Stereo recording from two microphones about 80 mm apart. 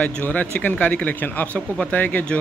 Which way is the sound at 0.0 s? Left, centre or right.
Centre.